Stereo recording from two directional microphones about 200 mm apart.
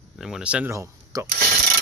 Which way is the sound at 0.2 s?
5° right (ahead or behind).